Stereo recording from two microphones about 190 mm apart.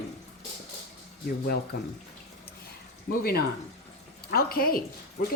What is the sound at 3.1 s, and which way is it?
Speech, 50° left (ahead or behind).